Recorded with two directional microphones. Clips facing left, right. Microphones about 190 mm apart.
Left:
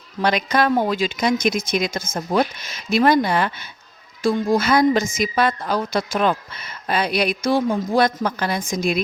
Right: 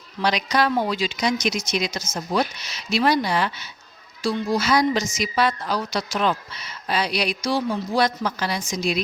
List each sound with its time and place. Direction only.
0.2 s a woman's voice: 55° left (ahead or behind)